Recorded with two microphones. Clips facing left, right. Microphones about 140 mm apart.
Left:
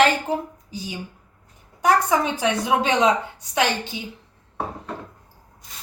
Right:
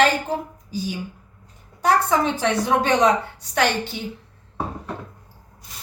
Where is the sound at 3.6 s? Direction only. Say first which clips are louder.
Right 1 dB; 15° left (ahead or behind).